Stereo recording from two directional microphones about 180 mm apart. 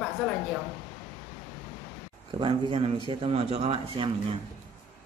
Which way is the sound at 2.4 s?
30° right (ahead or behind).